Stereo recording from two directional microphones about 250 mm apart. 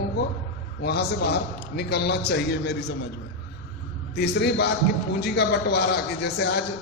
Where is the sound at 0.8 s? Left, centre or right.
Left.